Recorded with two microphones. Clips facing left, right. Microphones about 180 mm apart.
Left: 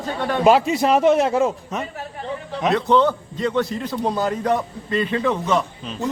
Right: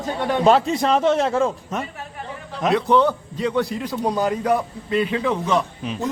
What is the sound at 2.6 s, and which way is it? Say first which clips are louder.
A man's voice: even; 10° right (ahead or behind).